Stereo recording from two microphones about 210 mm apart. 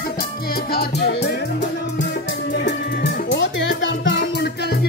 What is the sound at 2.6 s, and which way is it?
Music, 55° left (ahead or behind).